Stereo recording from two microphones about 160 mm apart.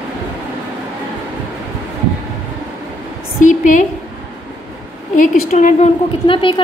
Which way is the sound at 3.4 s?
50° left (ahead or behind).